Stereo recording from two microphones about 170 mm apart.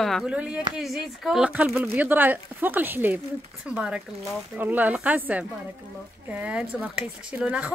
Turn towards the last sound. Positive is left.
turn(degrees=-10)  # may be behind; listen again after turning